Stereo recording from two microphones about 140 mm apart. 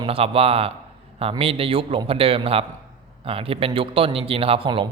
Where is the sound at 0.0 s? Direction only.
40° right (ahead or behind).